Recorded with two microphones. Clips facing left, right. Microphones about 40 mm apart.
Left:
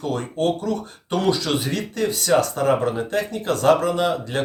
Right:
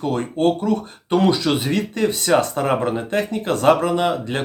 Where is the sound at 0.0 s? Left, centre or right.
Right.